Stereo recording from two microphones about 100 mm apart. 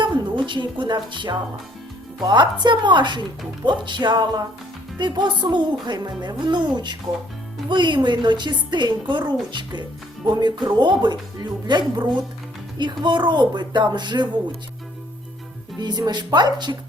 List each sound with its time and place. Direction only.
0.0 s a woman's voice: 50° right (ahead or behind)
15.8 s a woman's voice: 45° right (ahead or behind)